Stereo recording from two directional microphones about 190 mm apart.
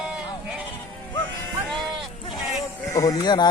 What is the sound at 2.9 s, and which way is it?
Speech, 20° left (ahead or behind).